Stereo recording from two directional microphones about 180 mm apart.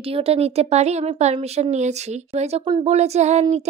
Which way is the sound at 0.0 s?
30° right (ahead or behind).